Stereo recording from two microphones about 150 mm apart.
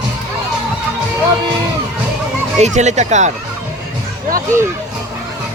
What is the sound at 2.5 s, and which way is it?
Speech, 50° right (ahead or behind).